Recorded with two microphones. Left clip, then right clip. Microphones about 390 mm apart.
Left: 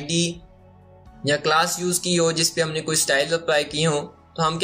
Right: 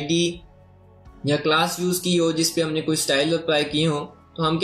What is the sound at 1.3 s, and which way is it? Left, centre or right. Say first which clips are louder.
Speech: left 1 dB; left.